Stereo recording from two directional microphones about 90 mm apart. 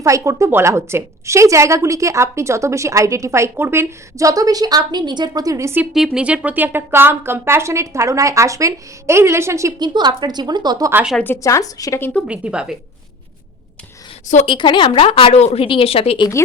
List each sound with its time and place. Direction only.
0.0 s a woman's voice: 35° right (ahead or behind)
5.9 s a woman's voice: 5° right (ahead or behind); by 9.7 s 30° right (ahead or behind)
9.7 s speech: 55° right (ahead or behind)
11.4 s a woman's voice: 40° left (ahead or behind)
12.3 s a woman's voice: 10° right (ahead or behind)
14.4 s speech: 65° left (ahead or behind); by 16.2 s 90° left